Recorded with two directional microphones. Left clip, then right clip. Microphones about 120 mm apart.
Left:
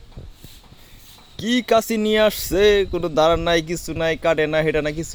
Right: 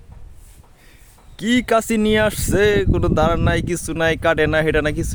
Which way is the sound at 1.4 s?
85° right.